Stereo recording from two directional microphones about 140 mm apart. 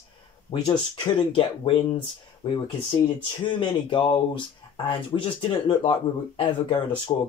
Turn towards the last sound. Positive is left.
turn(degrees=40)  # may be behind; listen again after turning